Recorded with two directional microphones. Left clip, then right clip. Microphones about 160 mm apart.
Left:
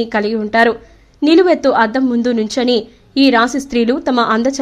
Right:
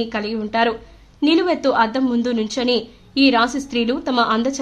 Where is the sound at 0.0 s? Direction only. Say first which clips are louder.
Left 7 dB; 35° left (ahead or behind).